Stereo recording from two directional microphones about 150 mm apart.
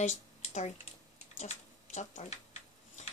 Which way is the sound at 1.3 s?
50° left (ahead or behind).